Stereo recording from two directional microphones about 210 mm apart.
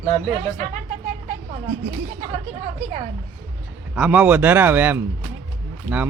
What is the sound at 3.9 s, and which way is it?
Speech, 5° right (ahead or behind).